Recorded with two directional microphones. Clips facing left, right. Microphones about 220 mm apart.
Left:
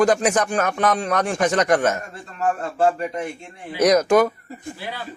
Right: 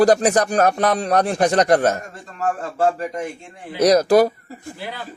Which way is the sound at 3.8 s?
35° right (ahead or behind).